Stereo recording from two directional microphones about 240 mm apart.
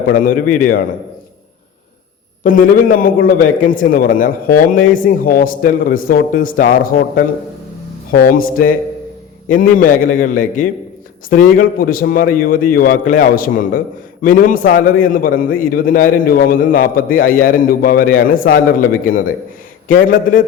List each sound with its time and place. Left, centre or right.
0.1 s a man's voice: left
2.4 s a man's voice: left
8.1 s a man's voice: left